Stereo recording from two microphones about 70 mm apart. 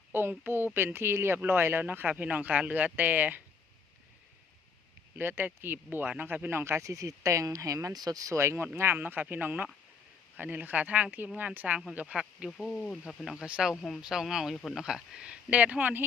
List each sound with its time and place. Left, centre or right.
0.1 s speech: right
5.1 s speech: right
6.5 s speech: right
7.9 s speech: right
12.5 s speech: centre
13.4 s speech: centre
14.5 s speech: centre
14.8 s speech: centre; by 16.0 s right